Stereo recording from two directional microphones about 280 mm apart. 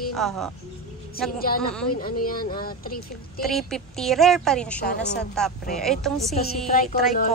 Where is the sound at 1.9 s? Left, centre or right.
Left.